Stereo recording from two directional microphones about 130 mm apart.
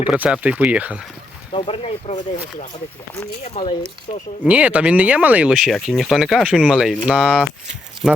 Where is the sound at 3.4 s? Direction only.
45° left (ahead or behind).